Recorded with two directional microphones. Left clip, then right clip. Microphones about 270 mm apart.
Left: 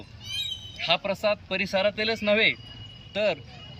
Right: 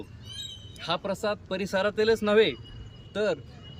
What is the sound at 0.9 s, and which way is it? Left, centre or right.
A man's voice, centre.